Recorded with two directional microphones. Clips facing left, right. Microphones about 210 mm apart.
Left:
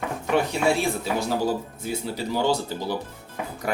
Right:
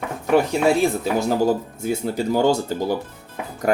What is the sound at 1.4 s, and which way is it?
Speech, 45° right (ahead or behind).